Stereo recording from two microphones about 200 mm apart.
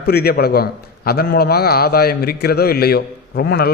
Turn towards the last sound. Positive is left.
turn(degrees=50)  # may be behind; listen again after turning